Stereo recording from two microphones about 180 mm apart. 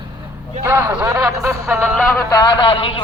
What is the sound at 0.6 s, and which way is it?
Speech, 15° right (ahead or behind).